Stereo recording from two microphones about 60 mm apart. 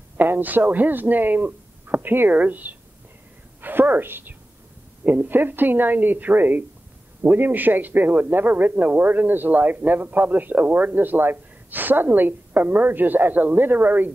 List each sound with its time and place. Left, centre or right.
0.2 s a woman's voice: right